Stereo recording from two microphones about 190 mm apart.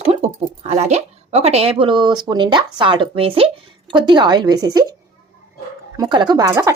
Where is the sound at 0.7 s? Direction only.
35° right (ahead or behind); by 4.9 s 20° right (ahead or behind).